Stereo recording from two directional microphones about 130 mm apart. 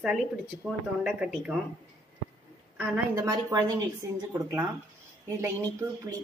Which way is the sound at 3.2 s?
25° right (ahead or behind).